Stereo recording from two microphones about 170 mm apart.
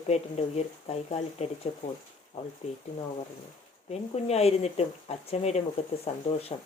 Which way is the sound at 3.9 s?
35° left (ahead or behind).